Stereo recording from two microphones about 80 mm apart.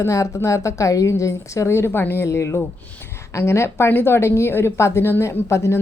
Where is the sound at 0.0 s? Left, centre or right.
Left.